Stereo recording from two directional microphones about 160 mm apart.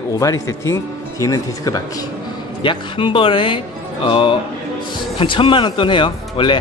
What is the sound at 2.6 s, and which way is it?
Speech, 30° left (ahead or behind).